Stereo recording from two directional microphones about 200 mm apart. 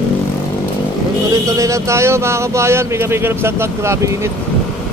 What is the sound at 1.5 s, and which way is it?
Speech, 15° right (ahead or behind).